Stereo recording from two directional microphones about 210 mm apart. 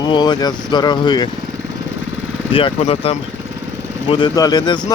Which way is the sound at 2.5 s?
25° left (ahead or behind).